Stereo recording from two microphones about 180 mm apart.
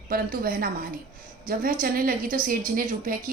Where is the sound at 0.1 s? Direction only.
55° right (ahead or behind).